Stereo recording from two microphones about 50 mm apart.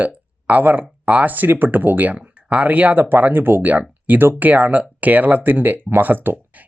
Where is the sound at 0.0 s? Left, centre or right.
Right.